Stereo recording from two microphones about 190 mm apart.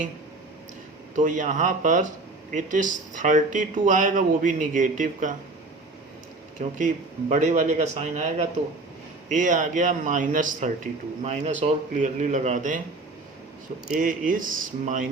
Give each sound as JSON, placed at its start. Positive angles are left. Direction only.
{"t": 1.1, "sound": "speech", "side_deg": -40}
{"t": 6.6, "sound": "speech", "side_deg": -40}
{"t": 14.0, "sound": "speech", "side_deg": -45}